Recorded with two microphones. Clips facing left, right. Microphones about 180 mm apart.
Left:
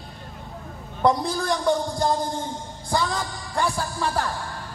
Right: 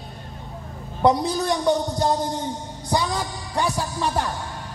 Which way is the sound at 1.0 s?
20° right (ahead or behind).